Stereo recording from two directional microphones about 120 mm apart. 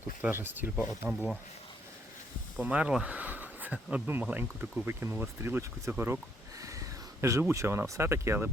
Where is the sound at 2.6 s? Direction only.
10° right (ahead or behind).